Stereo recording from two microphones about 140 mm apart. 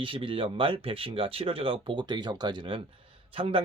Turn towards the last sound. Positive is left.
turn(degrees=-40)  # may be behind; listen again after turning